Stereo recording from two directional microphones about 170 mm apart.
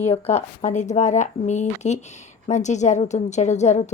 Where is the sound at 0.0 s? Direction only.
40° left (ahead or behind).